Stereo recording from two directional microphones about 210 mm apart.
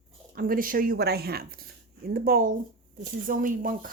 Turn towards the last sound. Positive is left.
turn(degrees=-40)  # may be behind; listen again after turning